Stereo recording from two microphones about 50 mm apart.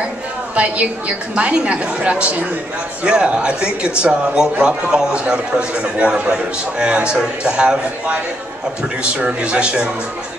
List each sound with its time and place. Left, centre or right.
0.6 s a woman's voice: right